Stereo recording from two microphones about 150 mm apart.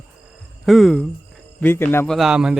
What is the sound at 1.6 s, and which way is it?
Speech, 15° left (ahead or behind).